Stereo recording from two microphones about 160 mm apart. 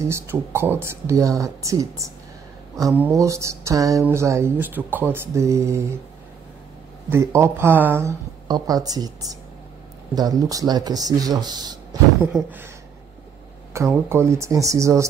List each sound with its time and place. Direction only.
0.1 s speech: 15° right (ahead or behind)
7.1 s speech: 15° right (ahead or behind)
12.4 s speech: 10° right (ahead or behind)
13.7 s speech: 15° right (ahead or behind)